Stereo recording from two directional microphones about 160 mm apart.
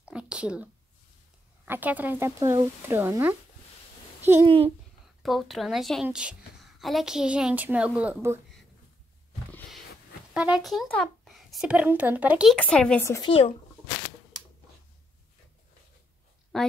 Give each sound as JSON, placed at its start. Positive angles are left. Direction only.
{"t": 0.0, "sound": "a sound", "side_deg": -5}
{"t": 1.7, "sound": "a woman's voice", "side_deg": -10}
{"t": 4.5, "sound": "a child's voice", "side_deg": -35}
{"t": 5.2, "sound": "a woman's voice", "side_deg": 0}
{"t": 10.3, "sound": "speech", "side_deg": -5}
{"t": 12.5, "sound": "speech", "side_deg": 5}
{"t": 13.2, "sound": "speech", "side_deg": 35}
{"t": 16.5, "sound": "speech", "side_deg": 0}